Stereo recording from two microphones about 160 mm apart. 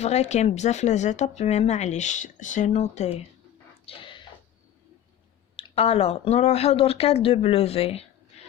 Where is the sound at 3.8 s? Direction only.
35° left (ahead or behind).